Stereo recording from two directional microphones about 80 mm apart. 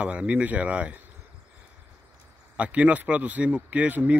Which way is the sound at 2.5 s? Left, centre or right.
Centre.